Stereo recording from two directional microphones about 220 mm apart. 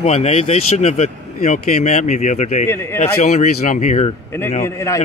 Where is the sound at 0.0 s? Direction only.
30° left (ahead or behind).